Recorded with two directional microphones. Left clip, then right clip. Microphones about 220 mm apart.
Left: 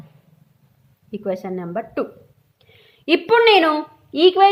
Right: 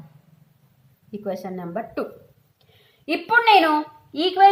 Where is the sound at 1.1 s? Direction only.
30° left (ahead or behind).